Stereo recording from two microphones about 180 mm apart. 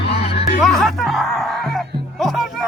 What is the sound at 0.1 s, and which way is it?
Music, 35° left (ahead or behind).